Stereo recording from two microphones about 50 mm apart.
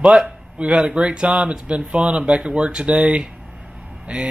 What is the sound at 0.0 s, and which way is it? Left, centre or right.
A man's voice, centre.